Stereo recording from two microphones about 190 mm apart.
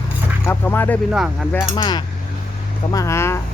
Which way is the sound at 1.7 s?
25° left (ahead or behind).